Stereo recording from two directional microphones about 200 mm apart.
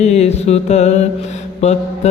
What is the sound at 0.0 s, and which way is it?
Mantra, 35° left (ahead or behind).